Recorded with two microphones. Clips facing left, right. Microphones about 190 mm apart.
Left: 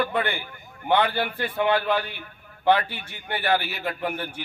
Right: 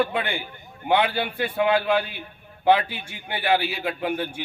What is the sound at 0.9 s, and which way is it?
A man's voice, 10° right (ahead or behind).